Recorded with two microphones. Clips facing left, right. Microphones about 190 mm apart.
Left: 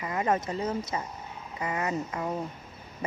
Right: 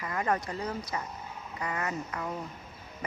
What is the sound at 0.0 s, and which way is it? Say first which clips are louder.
Speech: left 3 dB; 20° left (ahead or behind).